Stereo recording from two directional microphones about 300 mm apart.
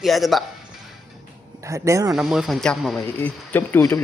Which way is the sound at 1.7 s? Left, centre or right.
Centre.